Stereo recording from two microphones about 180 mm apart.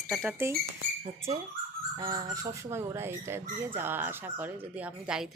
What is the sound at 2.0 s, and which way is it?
A woman's voice, 20° right (ahead or behind).